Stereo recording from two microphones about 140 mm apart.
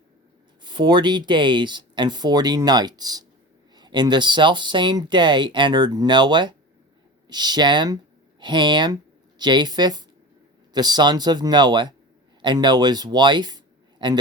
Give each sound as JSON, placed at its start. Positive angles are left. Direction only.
{"t": 0.6, "sound": "speech", "side_deg": -35}